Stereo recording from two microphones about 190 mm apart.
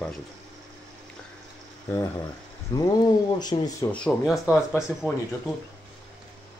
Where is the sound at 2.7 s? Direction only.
20° left (ahead or behind).